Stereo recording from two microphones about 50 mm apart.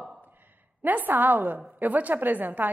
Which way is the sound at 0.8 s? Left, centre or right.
Right.